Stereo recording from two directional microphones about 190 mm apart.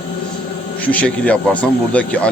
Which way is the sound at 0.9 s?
5° left (ahead or behind).